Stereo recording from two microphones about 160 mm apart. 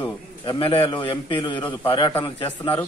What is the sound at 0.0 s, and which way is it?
A man's voice, 35° left (ahead or behind).